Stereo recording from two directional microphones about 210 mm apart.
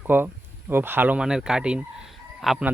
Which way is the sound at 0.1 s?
10° right (ahead or behind).